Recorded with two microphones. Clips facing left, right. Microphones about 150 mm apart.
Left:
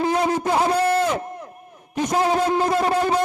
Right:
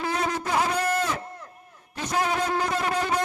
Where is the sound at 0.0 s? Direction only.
20° left (ahead or behind).